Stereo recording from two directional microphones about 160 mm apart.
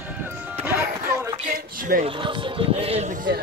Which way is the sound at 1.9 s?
70° right (ahead or behind).